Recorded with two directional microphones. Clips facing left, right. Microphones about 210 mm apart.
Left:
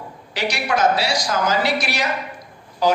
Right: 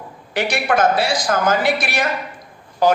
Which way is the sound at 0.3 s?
55° right (ahead or behind).